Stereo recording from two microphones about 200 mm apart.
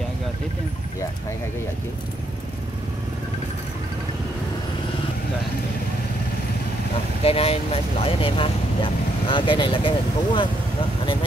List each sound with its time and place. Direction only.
7.2 s speech: 30° left (ahead or behind)